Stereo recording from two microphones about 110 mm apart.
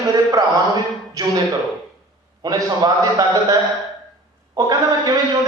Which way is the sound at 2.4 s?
35° right (ahead or behind).